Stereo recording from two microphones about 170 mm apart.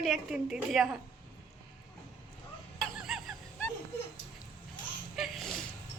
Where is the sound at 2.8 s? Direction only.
Centre (ahead or behind).